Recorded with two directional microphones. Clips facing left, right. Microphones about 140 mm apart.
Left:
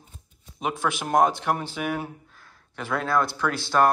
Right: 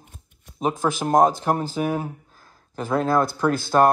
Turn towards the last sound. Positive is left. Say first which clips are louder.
# right 4 dB
turn(degrees=-45)  # may be behind; listen again after turning